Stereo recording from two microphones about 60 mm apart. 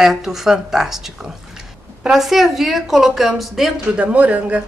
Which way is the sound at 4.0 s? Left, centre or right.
Right.